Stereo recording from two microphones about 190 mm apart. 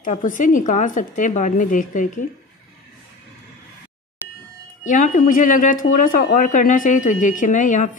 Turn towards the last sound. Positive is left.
turn(degrees=40)  # may be behind; listen again after turning